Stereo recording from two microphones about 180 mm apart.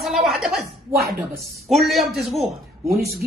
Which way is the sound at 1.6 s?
Centre (ahead or behind).